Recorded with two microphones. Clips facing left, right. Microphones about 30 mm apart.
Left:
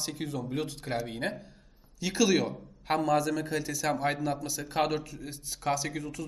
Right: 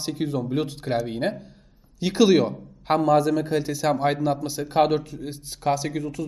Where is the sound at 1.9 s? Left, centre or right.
Right; by 6.2 s centre.